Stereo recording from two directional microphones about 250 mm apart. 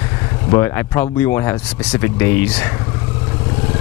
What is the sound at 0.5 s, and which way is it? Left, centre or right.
Speech, centre.